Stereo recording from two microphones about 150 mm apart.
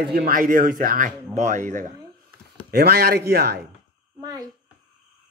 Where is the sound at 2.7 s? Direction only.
90° right.